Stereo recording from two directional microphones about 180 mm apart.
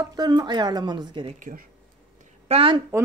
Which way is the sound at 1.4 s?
45° right (ahead or behind).